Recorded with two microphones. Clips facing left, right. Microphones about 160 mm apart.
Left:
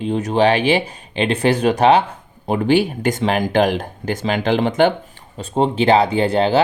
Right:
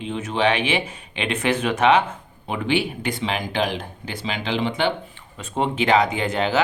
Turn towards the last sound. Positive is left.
turn(degrees=35)  # may be behind; listen again after turning